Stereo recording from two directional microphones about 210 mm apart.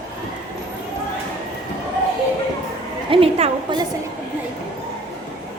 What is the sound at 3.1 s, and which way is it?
Speech, 25° right (ahead or behind).